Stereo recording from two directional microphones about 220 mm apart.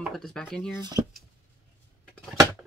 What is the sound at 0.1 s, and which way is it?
Speech, 5° left (ahead or behind).